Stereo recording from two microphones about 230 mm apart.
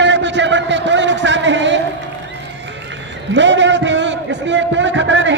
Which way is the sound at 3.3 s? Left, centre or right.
Right.